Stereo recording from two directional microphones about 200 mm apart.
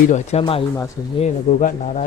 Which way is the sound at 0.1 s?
30° left (ahead or behind).